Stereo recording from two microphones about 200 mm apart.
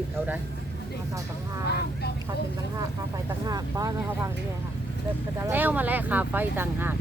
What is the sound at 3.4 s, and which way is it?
Speech, 20° right (ahead or behind).